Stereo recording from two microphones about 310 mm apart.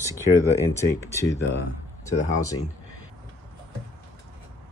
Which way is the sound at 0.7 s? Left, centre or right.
Centre.